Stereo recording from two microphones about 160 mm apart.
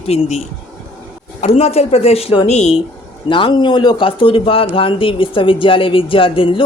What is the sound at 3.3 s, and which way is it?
Speech, 30° left (ahead or behind).